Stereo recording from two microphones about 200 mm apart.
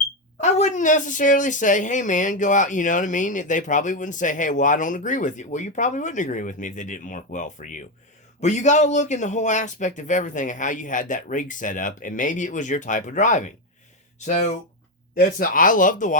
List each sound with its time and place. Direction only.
0.3 s speech: 35° left (ahead or behind)